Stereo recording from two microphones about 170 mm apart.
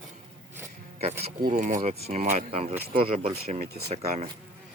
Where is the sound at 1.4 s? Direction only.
50° right (ahead or behind).